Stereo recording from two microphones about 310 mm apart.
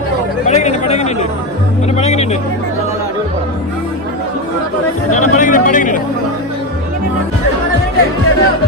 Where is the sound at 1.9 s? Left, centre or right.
Left.